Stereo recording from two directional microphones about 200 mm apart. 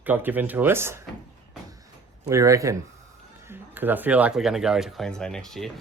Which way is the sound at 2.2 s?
15° right (ahead or behind).